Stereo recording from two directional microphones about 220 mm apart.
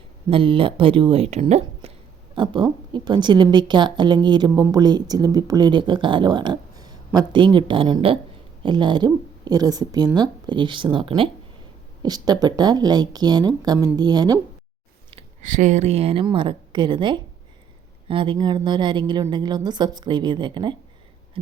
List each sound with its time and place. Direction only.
0.3 s a woman's voice: 25° right (ahead or behind)
15.1 s a woman's voice: 35° right (ahead or behind)